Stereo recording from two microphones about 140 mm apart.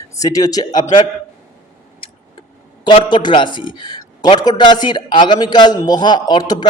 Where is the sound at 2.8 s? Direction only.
35° left (ahead or behind).